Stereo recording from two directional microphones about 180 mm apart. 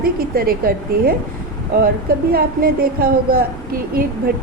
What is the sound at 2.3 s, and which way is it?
A woman's voice, 55° right (ahead or behind).